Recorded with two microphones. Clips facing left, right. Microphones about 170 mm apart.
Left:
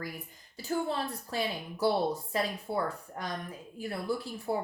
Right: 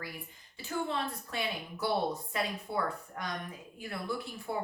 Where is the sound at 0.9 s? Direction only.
35° left (ahead or behind).